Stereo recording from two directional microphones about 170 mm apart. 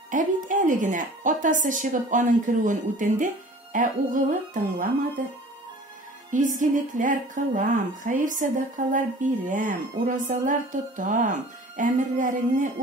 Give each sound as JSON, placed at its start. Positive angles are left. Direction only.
{"t": 0.1, "sound": "speech", "side_deg": -50}
{"t": 6.3, "sound": "speech", "side_deg": -50}